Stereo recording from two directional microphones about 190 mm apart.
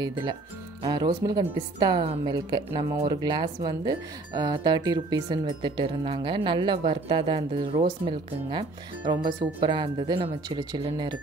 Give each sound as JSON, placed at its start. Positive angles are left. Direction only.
{"t": 0.0, "sound": "a woman's voice", "side_deg": -25}